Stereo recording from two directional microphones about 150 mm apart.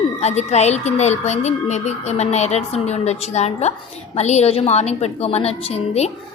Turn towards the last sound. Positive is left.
turn(degrees=45)  # may be behind; listen again after turning